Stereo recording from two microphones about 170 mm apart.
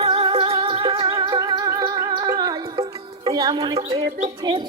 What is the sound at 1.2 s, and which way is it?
Music, 25° right (ahead or behind).